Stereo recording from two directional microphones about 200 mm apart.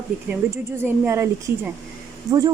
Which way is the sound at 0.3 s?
10° right (ahead or behind).